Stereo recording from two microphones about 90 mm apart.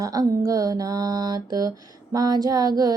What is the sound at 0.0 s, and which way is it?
Mantra, 40° right (ahead or behind).